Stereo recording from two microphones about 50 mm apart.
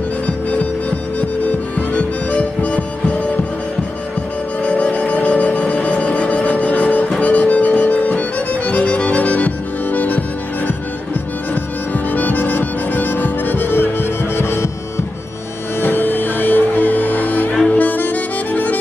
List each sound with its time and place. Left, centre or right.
0.5 s music: left
4.6 s music: left
11.9 s music: left
15.8 s music: left